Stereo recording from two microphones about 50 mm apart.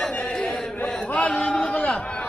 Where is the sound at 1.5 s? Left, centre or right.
Left.